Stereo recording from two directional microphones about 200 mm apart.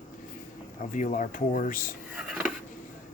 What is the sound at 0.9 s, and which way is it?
Speech, 40° left (ahead or behind).